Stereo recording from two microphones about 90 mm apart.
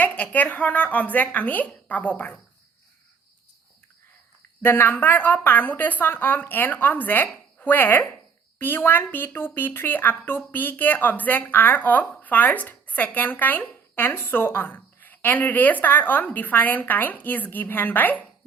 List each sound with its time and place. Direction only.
0.0 s a woman's voice: 15° left (ahead or behind)
4.6 s a woman's voice: 25° left (ahead or behind)